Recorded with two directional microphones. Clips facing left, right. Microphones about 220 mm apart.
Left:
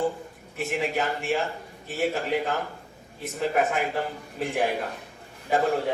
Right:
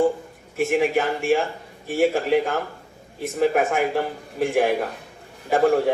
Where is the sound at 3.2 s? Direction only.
50° right (ahead or behind).